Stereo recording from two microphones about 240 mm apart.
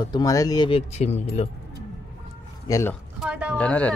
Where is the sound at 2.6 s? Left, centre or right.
Centre.